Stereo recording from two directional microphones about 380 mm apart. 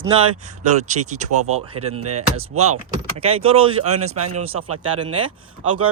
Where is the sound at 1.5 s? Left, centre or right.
Centre.